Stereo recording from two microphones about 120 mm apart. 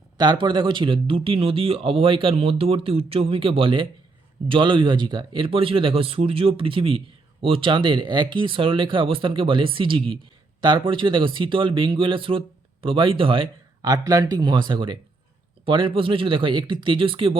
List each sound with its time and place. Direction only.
0.2 s speech: 40° right (ahead or behind)
13.8 s speech: 30° right (ahead or behind); by 17.3 s 45° right (ahead or behind)